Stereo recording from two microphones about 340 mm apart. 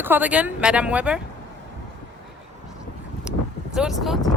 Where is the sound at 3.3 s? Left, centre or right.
Centre.